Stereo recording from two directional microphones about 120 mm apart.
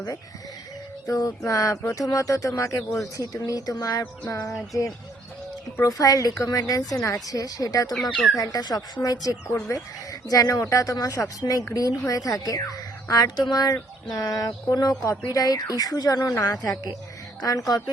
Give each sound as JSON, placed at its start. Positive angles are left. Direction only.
{"t": 1.0, "sound": "speech", "side_deg": 30}
{"t": 5.7, "sound": "speech", "side_deg": 30}
{"t": 8.1, "sound": "speech", "side_deg": 0}
{"t": 8.4, "sound": "speech", "side_deg": 30}